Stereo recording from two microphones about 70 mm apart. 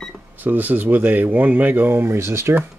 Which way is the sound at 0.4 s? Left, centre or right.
Right.